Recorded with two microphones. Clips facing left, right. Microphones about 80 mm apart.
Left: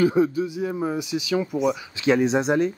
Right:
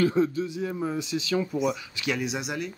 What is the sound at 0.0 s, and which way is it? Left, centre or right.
Speech, centre.